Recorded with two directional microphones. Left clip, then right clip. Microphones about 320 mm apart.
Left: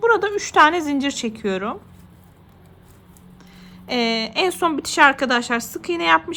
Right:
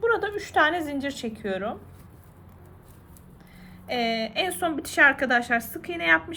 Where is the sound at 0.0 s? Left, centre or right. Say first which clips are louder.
Left 7 dB; left.